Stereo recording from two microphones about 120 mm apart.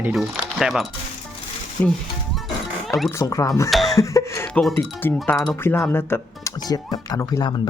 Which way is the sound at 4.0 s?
25° left (ahead or behind).